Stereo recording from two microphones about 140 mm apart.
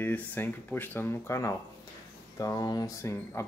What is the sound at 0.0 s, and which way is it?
Speech, 15° left (ahead or behind).